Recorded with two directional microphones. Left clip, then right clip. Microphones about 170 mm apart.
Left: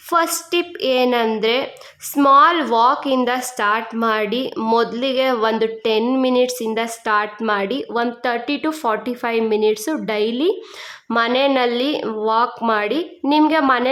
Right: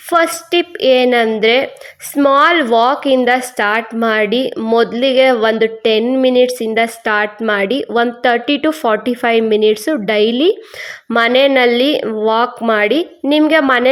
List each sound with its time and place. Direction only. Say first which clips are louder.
0.1 s a woman's voice: right 5 dB; 15° right (ahead or behind)